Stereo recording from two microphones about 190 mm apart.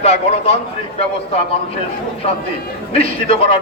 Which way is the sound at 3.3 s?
30° left (ahead or behind).